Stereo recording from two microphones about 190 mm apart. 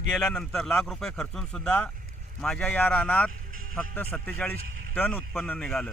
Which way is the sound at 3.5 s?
50° right (ahead or behind).